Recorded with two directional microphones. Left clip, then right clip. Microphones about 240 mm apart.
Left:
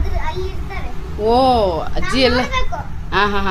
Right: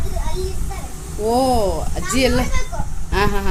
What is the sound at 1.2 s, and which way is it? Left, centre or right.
A child's voice, centre.